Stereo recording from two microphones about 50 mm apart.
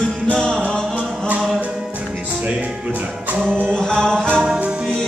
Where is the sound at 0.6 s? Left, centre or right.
Centre.